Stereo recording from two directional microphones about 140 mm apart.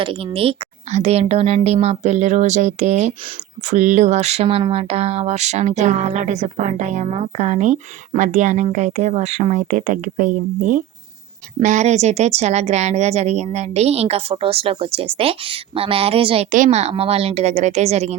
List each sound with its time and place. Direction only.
0.0 s speech: 40° right (ahead or behind)
16.5 s speech: 55° right (ahead or behind)